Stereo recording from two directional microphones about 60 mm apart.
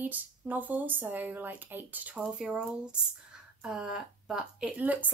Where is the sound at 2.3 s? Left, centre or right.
Centre.